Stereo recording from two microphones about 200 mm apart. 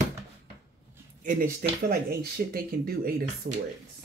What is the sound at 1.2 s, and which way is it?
Speech, 40° right (ahead or behind).